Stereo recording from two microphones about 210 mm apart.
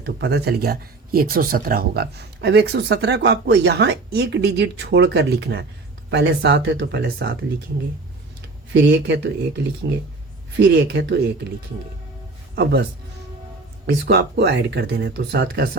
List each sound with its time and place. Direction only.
0.0 s speech: 50° right (ahead or behind)
8.7 s speech: 55° right (ahead or behind)
13.8 s speech: 50° right (ahead or behind)